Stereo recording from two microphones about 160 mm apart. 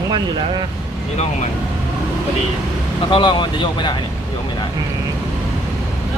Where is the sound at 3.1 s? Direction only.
30° left (ahead or behind).